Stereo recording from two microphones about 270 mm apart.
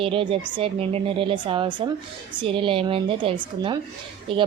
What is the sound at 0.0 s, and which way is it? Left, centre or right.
A woman's voice, centre.